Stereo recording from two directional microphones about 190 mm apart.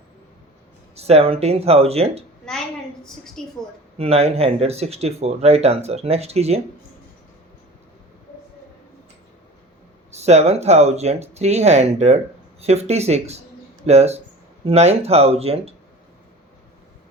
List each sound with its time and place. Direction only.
0.9 s speech: 35° right (ahead or behind)
2.4 s a sound: 5° left (ahead or behind)
3.9 s speech: 30° right (ahead or behind)
10.1 s speech: 35° right (ahead or behind)